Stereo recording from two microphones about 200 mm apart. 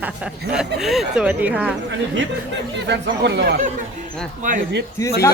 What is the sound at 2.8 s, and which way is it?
Speech, 60° right (ahead or behind).